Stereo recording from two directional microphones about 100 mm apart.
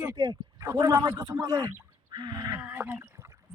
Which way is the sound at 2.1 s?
45° right (ahead or behind).